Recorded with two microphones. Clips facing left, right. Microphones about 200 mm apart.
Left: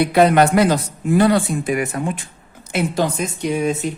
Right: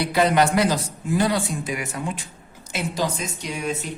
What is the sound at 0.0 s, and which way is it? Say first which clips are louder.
Speech: left 6 dB; 55° left (ahead or behind).